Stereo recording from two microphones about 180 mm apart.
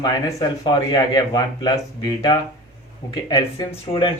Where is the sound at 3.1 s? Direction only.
20° left (ahead or behind).